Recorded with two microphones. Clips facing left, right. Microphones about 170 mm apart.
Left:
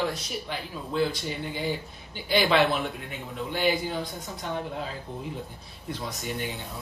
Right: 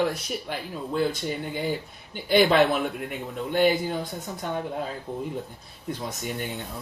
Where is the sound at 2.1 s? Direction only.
50° right (ahead or behind).